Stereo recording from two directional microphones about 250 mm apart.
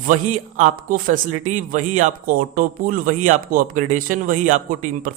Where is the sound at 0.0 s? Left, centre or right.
Right.